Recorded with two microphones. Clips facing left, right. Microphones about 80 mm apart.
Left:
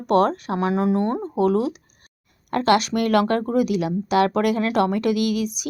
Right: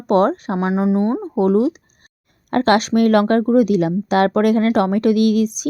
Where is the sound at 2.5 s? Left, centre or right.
Right.